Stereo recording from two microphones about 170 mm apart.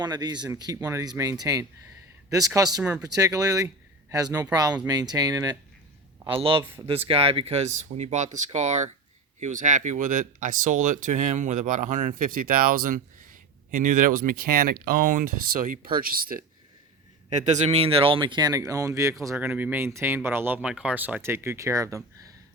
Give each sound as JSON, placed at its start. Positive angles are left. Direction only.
{"t": 0.0, "sound": "speech", "side_deg": -25}
{"t": 17.2, "sound": "speech", "side_deg": -45}